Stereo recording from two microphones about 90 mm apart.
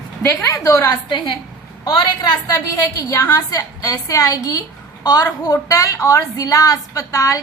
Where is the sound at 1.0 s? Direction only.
55° left (ahead or behind).